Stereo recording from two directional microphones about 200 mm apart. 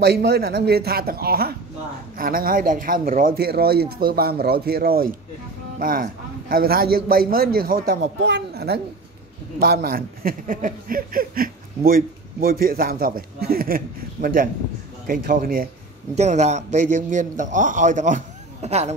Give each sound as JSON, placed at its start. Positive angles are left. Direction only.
{"t": 0.0, "sound": "speech", "side_deg": -55}
{"t": 16.2, "sound": "a man's voice", "side_deg": -35}